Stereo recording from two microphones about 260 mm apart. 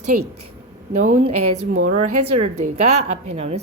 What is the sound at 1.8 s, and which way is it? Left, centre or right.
Speech, right.